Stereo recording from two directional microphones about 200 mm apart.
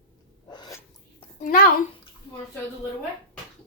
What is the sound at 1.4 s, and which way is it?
Speech, 45° left (ahead or behind).